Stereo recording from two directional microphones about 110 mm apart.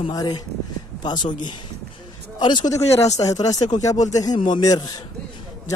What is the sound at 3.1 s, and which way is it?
Speech, 30° left (ahead or behind).